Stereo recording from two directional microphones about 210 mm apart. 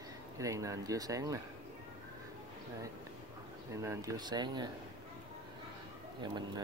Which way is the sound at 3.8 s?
15° right (ahead or behind).